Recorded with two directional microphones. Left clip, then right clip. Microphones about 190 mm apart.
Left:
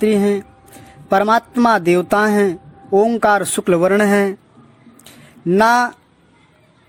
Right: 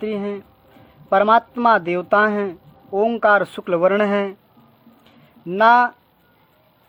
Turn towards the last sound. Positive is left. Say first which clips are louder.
# even
turn(degrees=35)  # may be behind; listen again after turning